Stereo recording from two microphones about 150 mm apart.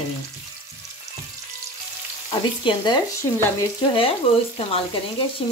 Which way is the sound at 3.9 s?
40° left (ahead or behind).